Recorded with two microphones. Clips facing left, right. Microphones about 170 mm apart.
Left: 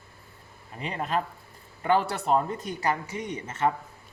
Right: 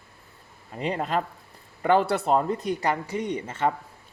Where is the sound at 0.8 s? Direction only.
35° right (ahead or behind).